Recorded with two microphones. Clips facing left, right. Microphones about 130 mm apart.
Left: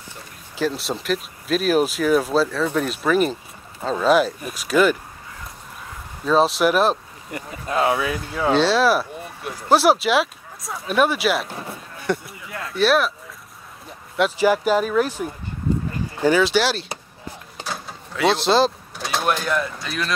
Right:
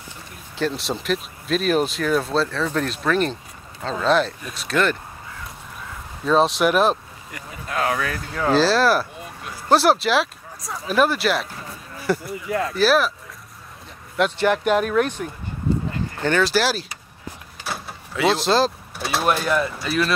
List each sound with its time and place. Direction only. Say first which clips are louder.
0.6 s speech: left 1 dB; centre (ahead or behind)
6.2 s speech: even; centre (ahead or behind)
7.3 s speech: left 4 dB; 25° left (ahead or behind)
8.0 s speech: left 2 dB; 5° left (ahead or behind)
14.1 s speech: left 1 dB; 5° left (ahead or behind)